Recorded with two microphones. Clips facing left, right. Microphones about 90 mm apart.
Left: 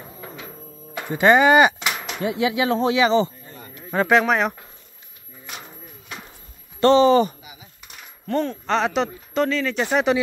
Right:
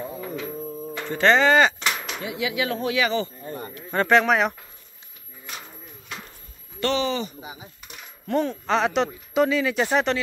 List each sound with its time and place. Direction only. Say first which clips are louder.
0.9 s a sound: left 3 dB; 15° left (ahead or behind)
2.2 s speech: left 6 dB; 30° left (ahead or behind)
3.4 s a sound: right 8 dB; 45° right (ahead or behind)
3.9 s speech: left 1 dB; 5° left (ahead or behind)
6.8 s speech: left 10 dB; 35° left (ahead or behind)
7.9 s speech: even; centre (ahead or behind)